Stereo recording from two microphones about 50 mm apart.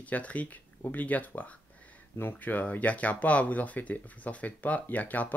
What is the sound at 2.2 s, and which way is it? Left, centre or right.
Speech, left.